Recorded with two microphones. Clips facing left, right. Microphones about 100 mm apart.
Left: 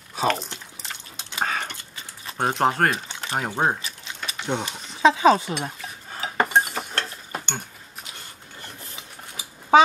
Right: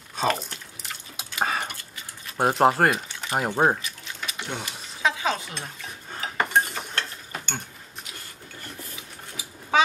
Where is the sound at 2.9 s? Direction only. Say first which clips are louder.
Even; 25° left (ahead or behind).